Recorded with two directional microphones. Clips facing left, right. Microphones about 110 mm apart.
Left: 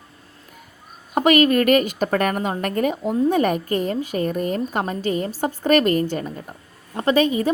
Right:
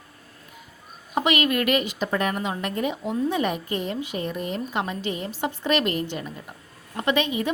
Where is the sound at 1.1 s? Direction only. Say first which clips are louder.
Left 7 dB; 45° left (ahead or behind).